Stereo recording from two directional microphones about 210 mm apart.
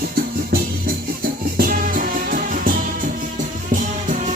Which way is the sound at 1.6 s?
40° right (ahead or behind).